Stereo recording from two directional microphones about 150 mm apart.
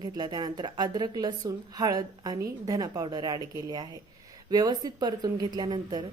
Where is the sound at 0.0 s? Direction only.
30° right (ahead or behind).